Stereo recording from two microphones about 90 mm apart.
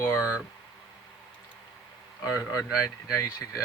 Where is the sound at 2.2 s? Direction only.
40° left (ahead or behind).